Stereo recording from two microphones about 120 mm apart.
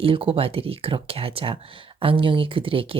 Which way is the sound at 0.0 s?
50° right (ahead or behind).